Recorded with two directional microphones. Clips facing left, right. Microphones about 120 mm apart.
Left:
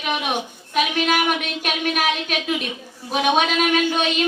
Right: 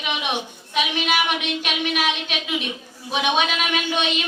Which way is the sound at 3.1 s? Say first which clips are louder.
Left 3 dB; 40° left (ahead or behind).